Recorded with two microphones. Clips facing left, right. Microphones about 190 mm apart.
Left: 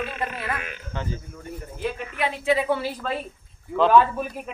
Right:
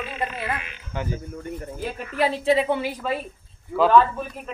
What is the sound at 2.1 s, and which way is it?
Speech, 35° right (ahead or behind).